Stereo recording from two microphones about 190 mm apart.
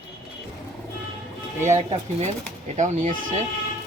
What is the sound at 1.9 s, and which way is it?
Speech, 35° right (ahead or behind).